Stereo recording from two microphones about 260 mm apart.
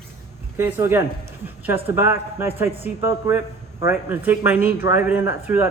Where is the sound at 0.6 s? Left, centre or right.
Centre.